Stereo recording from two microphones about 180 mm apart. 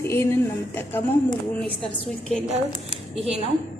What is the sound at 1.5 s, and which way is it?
Speech, 5° left (ahead or behind).